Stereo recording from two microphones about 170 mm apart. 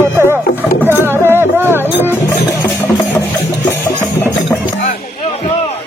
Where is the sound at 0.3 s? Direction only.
15° right (ahead or behind).